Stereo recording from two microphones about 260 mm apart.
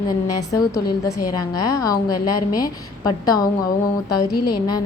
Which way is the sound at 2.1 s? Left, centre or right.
Left.